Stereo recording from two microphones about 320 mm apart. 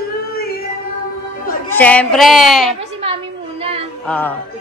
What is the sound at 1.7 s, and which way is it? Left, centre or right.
A woman's voice, centre.